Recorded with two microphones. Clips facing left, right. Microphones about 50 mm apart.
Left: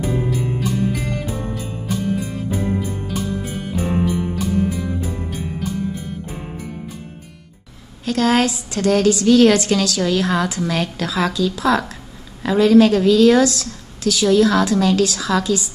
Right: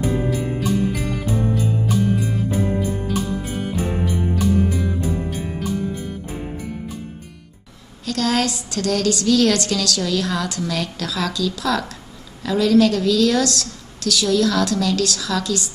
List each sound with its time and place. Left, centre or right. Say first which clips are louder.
0.0 s music: even; centre
8.0 s a woman's voice: left 4 dB; left